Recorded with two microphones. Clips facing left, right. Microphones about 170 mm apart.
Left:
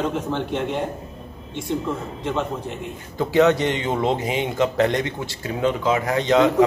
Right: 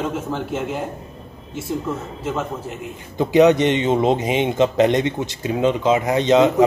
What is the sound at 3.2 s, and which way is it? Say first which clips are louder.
Speech: right 4 dB; 15° right (ahead or behind).